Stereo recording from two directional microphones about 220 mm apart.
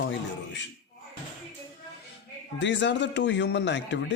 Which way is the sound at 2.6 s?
55° left (ahead or behind).